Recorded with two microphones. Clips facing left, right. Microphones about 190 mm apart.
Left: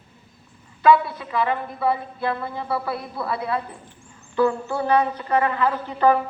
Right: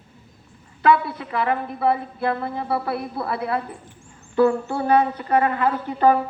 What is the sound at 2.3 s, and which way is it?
Speech, 30° right (ahead or behind).